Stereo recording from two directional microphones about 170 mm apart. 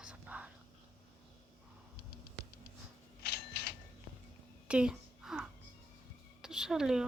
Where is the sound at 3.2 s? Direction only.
70° left (ahead or behind).